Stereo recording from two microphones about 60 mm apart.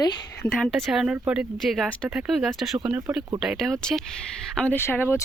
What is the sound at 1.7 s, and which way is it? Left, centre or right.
Speech, centre.